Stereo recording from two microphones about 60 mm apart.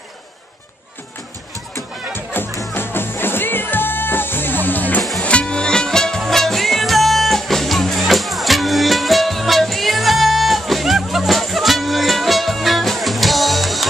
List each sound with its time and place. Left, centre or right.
2.3 s music: left
5.2 s music: centre